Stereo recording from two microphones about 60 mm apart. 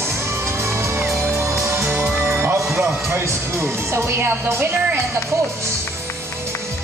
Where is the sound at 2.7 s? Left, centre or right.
Right.